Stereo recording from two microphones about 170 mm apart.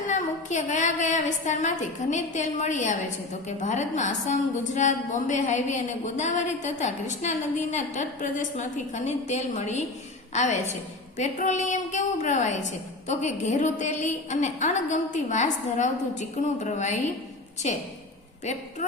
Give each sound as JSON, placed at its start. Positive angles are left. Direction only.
{"t": 0.1, "sound": "a woman's voice", "side_deg": 45}
{"t": 18.8, "sound": "a woman's voice", "side_deg": 45}